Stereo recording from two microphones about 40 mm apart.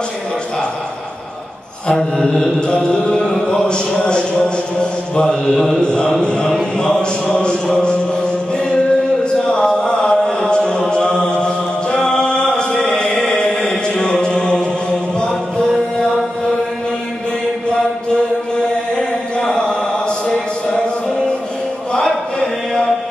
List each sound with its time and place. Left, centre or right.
2.1 s mantra: centre
6.5 s music: left
7.6 s mantra: left
8.5 s chant: left
18.9 s a sound: left
21.9 s chant: centre